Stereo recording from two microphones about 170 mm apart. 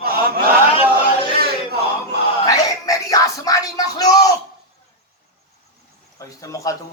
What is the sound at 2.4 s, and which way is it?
Music, 20° left (ahead or behind).